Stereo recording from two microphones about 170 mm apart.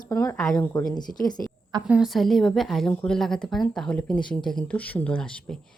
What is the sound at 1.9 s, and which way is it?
A woman's voice, 5° right (ahead or behind).